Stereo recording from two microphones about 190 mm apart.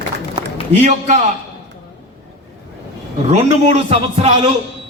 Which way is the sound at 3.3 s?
30° right (ahead or behind).